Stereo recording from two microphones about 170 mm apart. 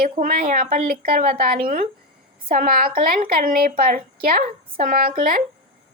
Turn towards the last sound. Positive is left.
turn(degrees=-55)  # may be behind; listen again after turning